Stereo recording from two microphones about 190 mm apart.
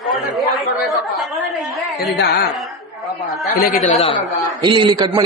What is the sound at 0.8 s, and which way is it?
Chatter, centre (ahead or behind).